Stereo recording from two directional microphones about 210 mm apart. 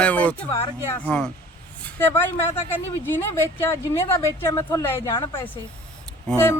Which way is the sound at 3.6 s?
10° left (ahead or behind).